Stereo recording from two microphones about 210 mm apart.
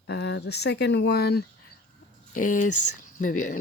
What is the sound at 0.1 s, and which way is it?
Speech, 55° left (ahead or behind).